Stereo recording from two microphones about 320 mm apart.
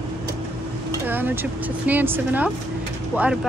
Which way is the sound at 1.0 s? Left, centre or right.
Centre.